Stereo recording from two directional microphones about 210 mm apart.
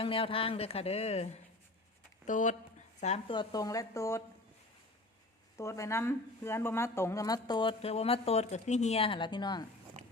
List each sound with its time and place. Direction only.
0.0 s speech: 25° left (ahead or behind)
5.5 s speech: 15° left (ahead or behind)
10.0 s a sound: 30° right (ahead or behind)